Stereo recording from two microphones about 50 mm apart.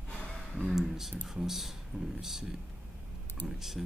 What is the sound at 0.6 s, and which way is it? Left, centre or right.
Speech, centre.